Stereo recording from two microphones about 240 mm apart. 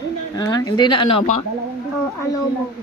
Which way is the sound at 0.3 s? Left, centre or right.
Centre.